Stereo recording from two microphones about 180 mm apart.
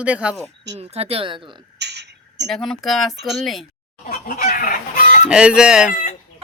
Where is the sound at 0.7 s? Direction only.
35° right (ahead or behind).